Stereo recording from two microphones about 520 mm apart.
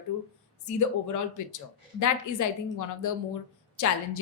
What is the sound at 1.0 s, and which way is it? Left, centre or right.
A woman's voice, left.